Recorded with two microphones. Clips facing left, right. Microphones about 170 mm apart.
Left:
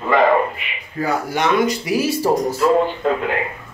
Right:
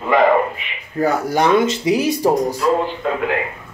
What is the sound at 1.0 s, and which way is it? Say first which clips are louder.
Speech: right 4 dB; 40° right (ahead or behind).